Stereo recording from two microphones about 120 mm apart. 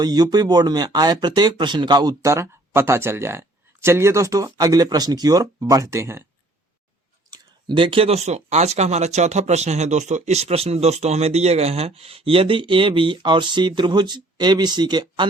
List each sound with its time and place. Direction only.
0.0 s speech: 35° right (ahead or behind)
7.7 s speech: 45° right (ahead or behind)